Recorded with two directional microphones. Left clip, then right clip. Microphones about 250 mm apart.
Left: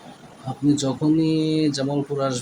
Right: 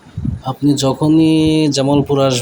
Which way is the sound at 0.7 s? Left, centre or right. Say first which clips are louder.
Right 7 dB; right.